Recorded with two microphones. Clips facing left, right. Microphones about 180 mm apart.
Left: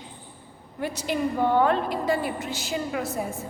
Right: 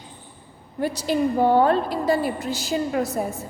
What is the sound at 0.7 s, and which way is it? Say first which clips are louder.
A woman's voice: right 5 dB; 35° right (ahead or behind).